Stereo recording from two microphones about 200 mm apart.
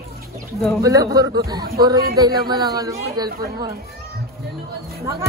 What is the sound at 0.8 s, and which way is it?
Speech, 20° right (ahead or behind).